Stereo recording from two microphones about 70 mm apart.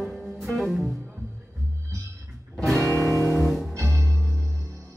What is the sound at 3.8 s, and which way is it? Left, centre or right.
Music, right.